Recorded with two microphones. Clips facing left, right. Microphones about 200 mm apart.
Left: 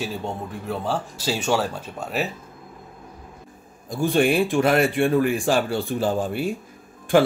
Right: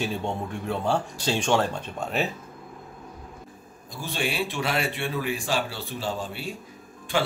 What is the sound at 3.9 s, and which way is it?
A man's voice, 55° left (ahead or behind).